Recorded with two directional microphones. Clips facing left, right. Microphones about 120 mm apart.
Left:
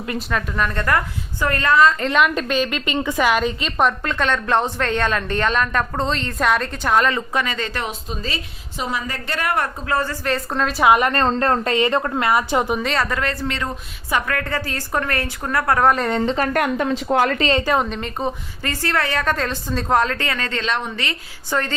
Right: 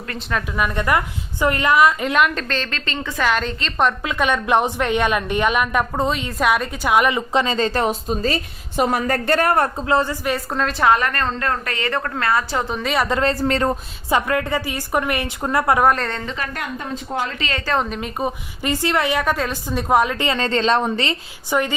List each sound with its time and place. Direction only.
0.3 s a woman's voice: 5° right (ahead or behind)
7.4 s a woman's voice: 30° right (ahead or behind)
9.8 s a woman's voice: 20° right (ahead or behind)
10.6 s a woman's voice: 5° left (ahead or behind)
10.9 s a woman's voice: 20° left (ahead or behind)
11.2 s a woman's voice: 35° left (ahead or behind)
11.7 s a woman's voice: 20° left (ahead or behind)
12.8 s a woman's voice: 10° right (ahead or behind)
13.1 s speech: 30° right (ahead or behind)
14.1 s a woman's voice: 20° right (ahead or behind)
16.2 s a woman's voice: 35° left (ahead or behind)
16.5 s speech: 75° left (ahead or behind)
17.8 s a woman's voice: 5° right (ahead or behind); by 21.2 s 30° right (ahead or behind)
21.5 s a woman's voice: 15° right (ahead or behind)